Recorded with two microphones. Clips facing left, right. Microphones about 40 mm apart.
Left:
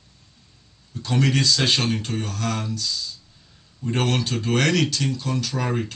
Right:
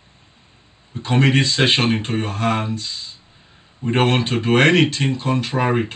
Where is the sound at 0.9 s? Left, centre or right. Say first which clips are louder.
Right 5 dB; right.